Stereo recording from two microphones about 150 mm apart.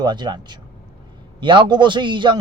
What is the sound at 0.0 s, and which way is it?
A man's voice, 30° right (ahead or behind).